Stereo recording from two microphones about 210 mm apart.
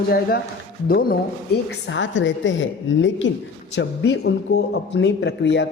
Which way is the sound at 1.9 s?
60° left (ahead or behind).